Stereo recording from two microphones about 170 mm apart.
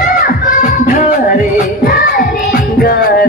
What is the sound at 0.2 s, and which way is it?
Music, 50° left (ahead or behind).